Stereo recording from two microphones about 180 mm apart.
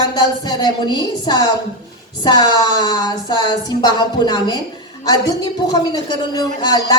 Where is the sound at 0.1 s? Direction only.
25° left (ahead or behind).